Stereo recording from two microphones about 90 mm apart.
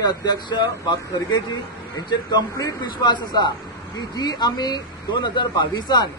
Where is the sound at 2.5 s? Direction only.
35° left (ahead or behind).